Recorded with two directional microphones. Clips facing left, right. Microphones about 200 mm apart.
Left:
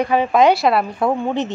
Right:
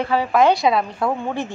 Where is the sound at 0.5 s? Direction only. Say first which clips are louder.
Left 1 dB; 5° left (ahead or behind).